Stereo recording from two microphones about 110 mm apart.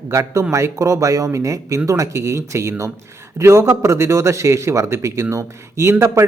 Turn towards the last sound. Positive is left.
turn(degrees=-25)  # may be behind; listen again after turning